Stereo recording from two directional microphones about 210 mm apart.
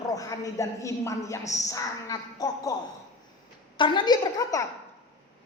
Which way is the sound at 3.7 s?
20° left (ahead or behind).